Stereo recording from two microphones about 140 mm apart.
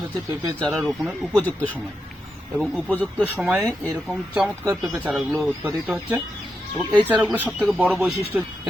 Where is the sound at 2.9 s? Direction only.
10° left (ahead or behind).